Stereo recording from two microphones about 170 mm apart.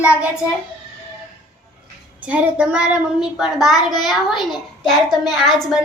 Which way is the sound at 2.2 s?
10° right (ahead or behind).